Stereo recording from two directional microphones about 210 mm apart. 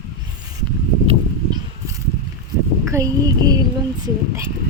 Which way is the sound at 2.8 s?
15° right (ahead or behind).